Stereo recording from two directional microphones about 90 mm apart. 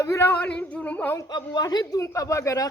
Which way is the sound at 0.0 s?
35° left (ahead or behind).